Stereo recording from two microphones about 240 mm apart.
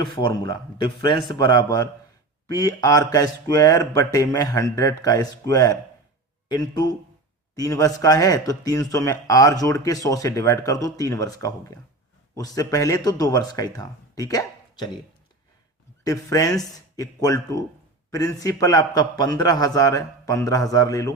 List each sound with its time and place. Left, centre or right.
0.0 s a man's voice: centre
16.0 s speech: centre